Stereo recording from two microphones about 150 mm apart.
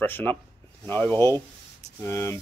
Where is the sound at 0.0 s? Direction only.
15° left (ahead or behind).